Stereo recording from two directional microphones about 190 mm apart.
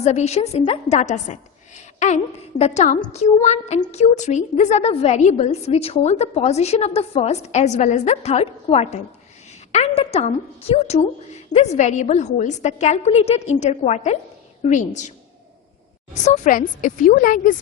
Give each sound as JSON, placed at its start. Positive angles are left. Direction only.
{"t": 0.0, "sound": "a woman's voice", "side_deg": 35}
{"t": 16.2, "sound": "a woman's voice", "side_deg": 40}